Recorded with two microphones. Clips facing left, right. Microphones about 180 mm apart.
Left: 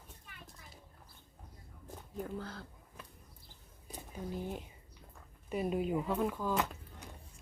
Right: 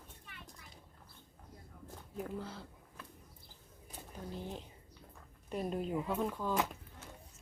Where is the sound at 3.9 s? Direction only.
10° left (ahead or behind).